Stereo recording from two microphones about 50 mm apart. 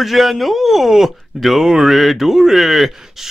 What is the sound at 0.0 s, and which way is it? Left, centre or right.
Speech, centre.